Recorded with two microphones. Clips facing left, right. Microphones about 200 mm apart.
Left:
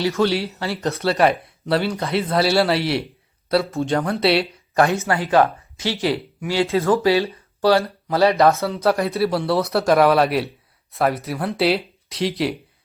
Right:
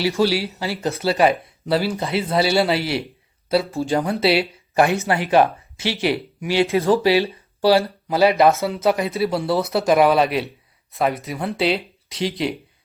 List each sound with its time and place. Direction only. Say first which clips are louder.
0.1 s speech: even; 10° right (ahead or behind)
4.7 s speech: even; 15° right (ahead or behind)
7.7 s speech: right 1 dB; 5° right (ahead or behind)